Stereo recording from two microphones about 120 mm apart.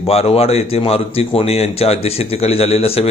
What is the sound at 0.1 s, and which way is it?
A man's voice, 55° left (ahead or behind).